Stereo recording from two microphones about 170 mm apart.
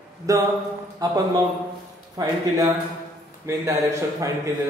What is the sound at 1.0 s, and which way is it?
A man's voice, 20° right (ahead or behind).